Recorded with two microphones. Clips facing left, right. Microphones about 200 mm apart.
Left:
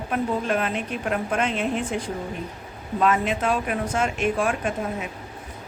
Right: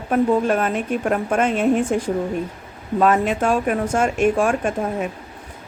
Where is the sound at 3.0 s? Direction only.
45° right (ahead or behind).